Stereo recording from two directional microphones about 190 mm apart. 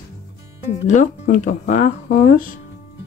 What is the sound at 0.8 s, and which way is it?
Speech, 40° left (ahead or behind).